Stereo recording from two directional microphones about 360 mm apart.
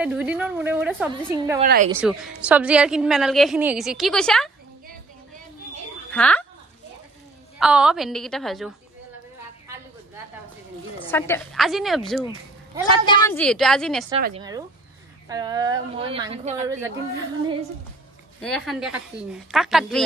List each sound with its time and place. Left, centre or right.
0.0 s a woman's voice: centre
1.6 s a woman's voice: right
1.9 s a woman's voice: centre
6.1 s a woman's voice: centre
7.5 s a woman's voice: centre
11.0 s a woman's voice: centre
14.2 s speech: centre
18.4 s a woman's voice: centre